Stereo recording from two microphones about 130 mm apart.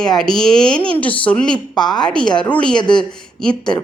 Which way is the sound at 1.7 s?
35° left (ahead or behind).